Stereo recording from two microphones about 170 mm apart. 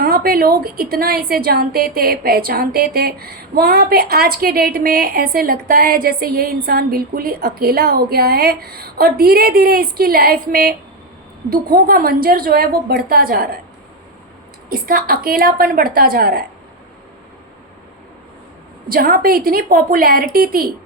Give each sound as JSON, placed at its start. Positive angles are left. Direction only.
{"t": 0.0, "sound": "a woman's voice", "side_deg": -60}
{"t": 14.7, "sound": "a woman's voice", "side_deg": -60}
{"t": 18.9, "sound": "a woman's voice", "side_deg": -55}